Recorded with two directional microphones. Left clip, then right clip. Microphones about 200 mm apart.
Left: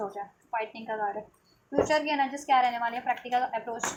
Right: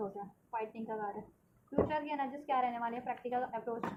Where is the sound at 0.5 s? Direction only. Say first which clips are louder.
Left 8 dB; 20° left (ahead or behind).